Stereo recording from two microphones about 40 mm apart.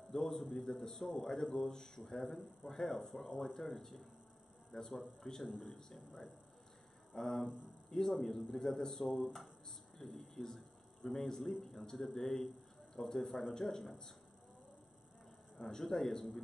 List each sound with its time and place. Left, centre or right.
0.1 s a man's voice: centre
2.0 s a man's voice: centre
5.5 s a man's voice: left
5.9 s a man's voice: centre
15.8 s a man's voice: centre